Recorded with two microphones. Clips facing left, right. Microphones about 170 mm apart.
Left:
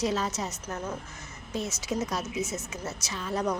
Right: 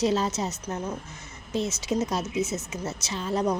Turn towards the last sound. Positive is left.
turn(degrees=-25)  # may be behind; listen again after turning